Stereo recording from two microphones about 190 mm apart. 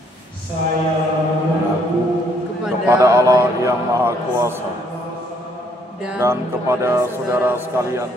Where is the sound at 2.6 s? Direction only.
5° right (ahead or behind).